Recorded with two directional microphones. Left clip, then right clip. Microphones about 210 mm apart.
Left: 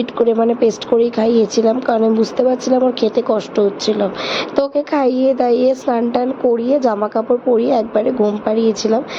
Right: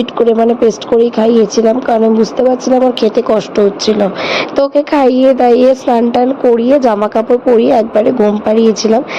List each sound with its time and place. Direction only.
0.0 s speech: 15° right (ahead or behind)